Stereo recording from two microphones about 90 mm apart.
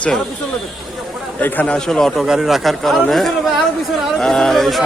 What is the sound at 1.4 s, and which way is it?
Speech, 20° left (ahead or behind).